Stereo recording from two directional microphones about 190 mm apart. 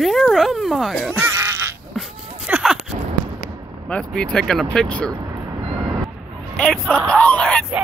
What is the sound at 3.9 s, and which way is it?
Speech, 5° left (ahead or behind).